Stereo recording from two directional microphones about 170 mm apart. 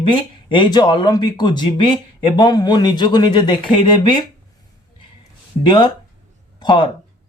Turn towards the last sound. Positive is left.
turn(degrees=30)  # may be behind; listen again after turning